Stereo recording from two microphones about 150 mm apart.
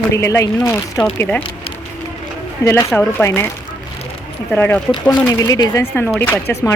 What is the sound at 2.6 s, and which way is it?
Speech, 20° left (ahead or behind).